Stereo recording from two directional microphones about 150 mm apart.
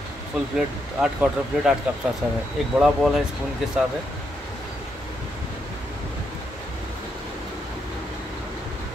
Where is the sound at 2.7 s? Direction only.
Centre (ahead or behind).